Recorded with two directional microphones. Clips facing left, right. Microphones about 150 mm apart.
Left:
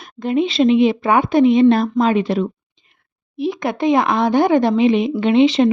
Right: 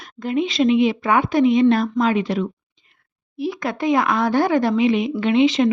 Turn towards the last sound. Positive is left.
turn(degrees=30)  # may be behind; listen again after turning